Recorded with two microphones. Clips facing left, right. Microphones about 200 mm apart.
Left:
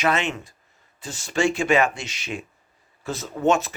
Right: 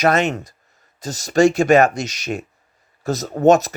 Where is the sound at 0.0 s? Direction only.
40° right (ahead or behind).